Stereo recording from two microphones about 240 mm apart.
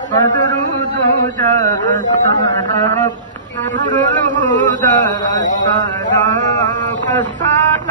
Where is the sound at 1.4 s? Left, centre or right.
Centre.